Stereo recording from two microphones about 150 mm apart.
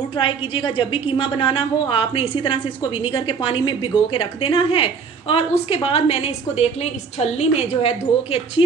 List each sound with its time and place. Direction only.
0.2 s a woman's voice: 35° left (ahead or behind)